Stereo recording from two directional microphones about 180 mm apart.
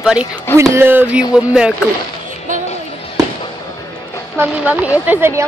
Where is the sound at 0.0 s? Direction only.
5° right (ahead or behind).